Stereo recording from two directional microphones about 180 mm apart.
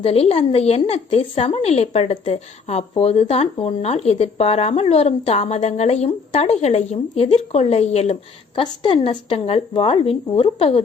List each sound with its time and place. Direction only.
0.0 s speech: 30° left (ahead or behind)